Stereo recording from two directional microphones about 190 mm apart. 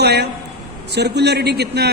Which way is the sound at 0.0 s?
60° right (ahead or behind).